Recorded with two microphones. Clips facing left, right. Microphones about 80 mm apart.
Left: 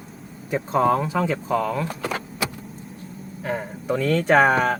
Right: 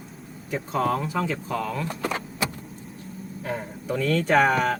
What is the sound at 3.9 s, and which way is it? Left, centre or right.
Speech, centre.